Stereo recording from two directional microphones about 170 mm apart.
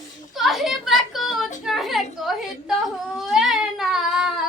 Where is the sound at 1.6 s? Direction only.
Centre (ahead or behind).